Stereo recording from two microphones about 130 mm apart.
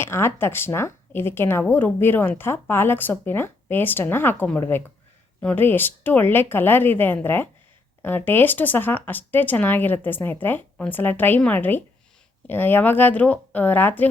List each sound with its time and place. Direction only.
0.0 s speech: 20° left (ahead or behind)